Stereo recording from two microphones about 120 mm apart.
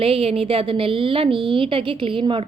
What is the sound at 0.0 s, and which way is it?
A woman's voice, 55° right (ahead or behind).